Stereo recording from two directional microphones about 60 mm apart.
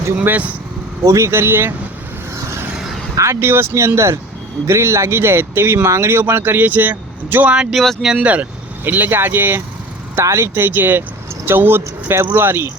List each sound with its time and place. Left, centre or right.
0.2 s speech: right
1.0 s speech: right
1.3 s speech: right
3.2 s speech: right
7.7 s speech: centre
8.0 s speech: centre
8.8 s speech: right
10.2 s speech: right